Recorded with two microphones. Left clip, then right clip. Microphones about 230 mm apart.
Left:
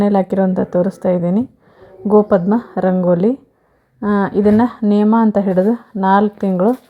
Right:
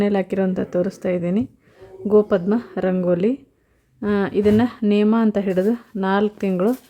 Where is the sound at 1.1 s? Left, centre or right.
Right.